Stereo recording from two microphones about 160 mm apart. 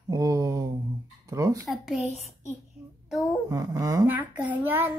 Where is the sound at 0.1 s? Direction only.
20° right (ahead or behind).